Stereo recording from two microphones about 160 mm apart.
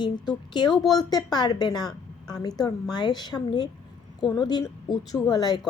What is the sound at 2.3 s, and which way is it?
A woman's voice, 25° left (ahead or behind).